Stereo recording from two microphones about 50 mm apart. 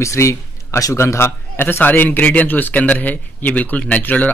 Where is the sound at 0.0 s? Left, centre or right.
Left.